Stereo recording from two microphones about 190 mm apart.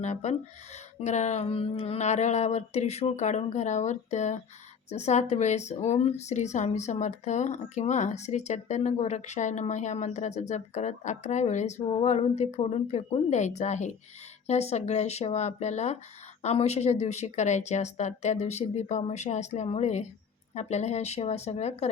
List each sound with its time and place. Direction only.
0.0 s speech: 35° left (ahead or behind)